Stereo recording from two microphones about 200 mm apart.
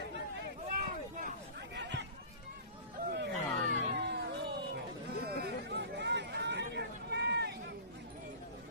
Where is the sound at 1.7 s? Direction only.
60° right (ahead or behind).